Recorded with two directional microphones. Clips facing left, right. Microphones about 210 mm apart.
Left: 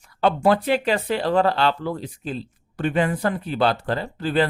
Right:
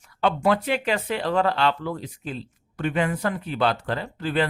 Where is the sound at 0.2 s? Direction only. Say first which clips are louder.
Left 3 dB; 35° left (ahead or behind).